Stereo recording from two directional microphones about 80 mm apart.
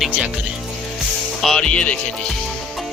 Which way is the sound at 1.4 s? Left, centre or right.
Centre.